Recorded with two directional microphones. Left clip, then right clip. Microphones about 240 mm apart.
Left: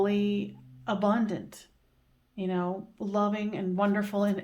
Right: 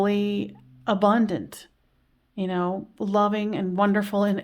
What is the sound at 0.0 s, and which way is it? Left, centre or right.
Speech, right.